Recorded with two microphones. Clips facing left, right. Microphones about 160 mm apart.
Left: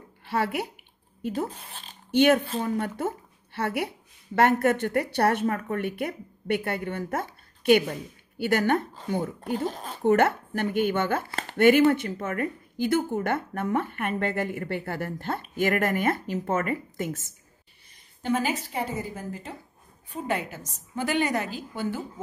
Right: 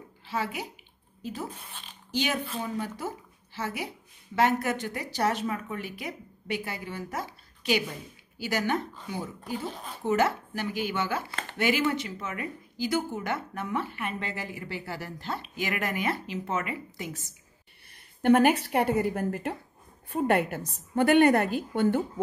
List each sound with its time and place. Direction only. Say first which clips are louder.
0.3 s a woman's voice: left 5 dB; 60° left (ahead or behind)
1.7 s speech: left 2 dB; 35° left (ahead or behind)
2.0 s a woman's voice: left 10 dB; 60° left (ahead or behind)
17.8 s a woman's voice: right 7 dB; 65° right (ahead or behind)